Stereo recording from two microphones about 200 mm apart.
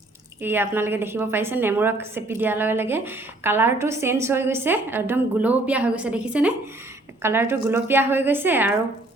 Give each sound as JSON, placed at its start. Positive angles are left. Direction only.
{"t": 0.4, "sound": "a woman's voice", "side_deg": -10}